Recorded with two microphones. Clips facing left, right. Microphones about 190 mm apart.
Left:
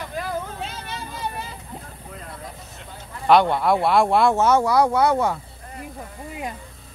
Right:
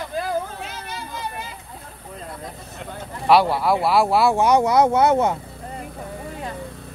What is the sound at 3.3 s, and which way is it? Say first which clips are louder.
Speech: even; 5° right (ahead or behind).